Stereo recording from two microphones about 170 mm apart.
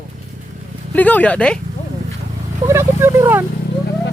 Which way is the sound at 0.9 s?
10° left (ahead or behind).